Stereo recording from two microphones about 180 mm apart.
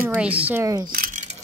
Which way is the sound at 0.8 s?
50° right (ahead or behind).